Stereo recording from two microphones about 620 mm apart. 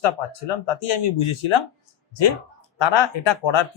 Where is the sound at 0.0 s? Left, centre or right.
Left.